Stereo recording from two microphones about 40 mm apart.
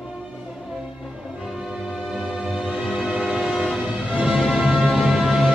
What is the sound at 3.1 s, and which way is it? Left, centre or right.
Train, right.